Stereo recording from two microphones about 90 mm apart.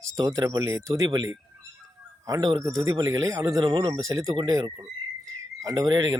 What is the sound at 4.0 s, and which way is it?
Speech, 35° right (ahead or behind).